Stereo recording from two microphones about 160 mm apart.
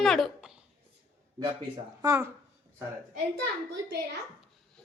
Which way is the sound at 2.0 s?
20° right (ahead or behind).